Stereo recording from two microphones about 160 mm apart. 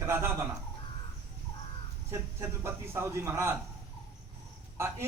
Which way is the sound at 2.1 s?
15° right (ahead or behind).